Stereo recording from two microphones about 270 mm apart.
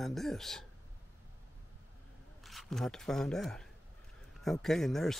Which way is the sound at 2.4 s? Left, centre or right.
Centre.